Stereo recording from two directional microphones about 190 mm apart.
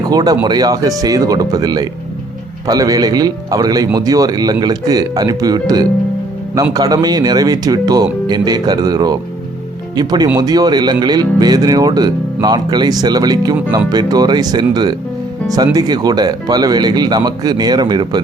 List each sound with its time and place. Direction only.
0.0 s speech: 20° right (ahead or behind)